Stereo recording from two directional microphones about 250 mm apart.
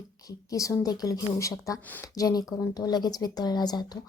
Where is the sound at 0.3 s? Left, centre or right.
Centre.